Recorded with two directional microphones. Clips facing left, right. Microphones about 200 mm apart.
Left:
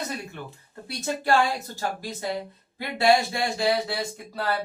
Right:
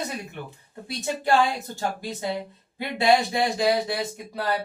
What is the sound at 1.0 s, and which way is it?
A woman's voice, 15° right (ahead or behind).